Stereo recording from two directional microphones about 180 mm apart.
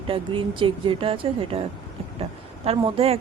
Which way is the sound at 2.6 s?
35° right (ahead or behind).